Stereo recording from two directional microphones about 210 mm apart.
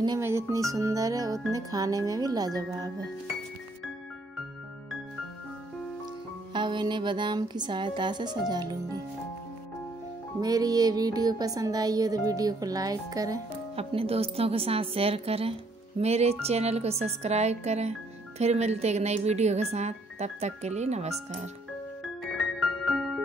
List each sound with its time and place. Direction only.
0.0 s music: 15° right (ahead or behind)
6.5 s speech: 20° right (ahead or behind)
10.4 s music: 20° right (ahead or behind)
13.7 s speech: 30° right (ahead or behind)
22.6 s music: centre (ahead or behind)